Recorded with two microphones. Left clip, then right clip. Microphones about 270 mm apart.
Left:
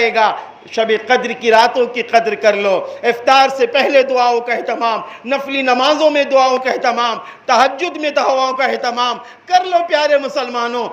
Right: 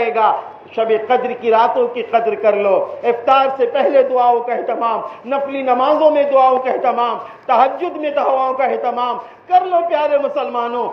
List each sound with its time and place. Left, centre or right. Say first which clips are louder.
0.0 s a man's voice: left 1 dB; left